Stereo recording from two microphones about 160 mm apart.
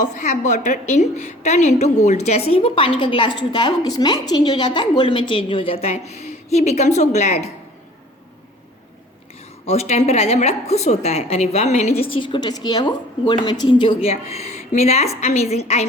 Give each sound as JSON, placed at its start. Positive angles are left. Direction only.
{"t": 0.0, "sound": "a woman's voice", "side_deg": 50}
{"t": 9.6, "sound": "a woman's voice", "side_deg": 45}